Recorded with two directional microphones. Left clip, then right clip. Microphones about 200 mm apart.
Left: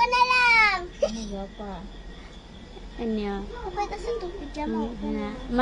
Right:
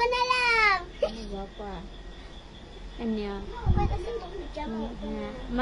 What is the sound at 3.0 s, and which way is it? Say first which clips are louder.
Speech: left 3 dB; 15° left (ahead or behind).